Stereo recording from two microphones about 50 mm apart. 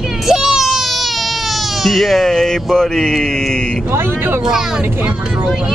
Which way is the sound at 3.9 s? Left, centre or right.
Right.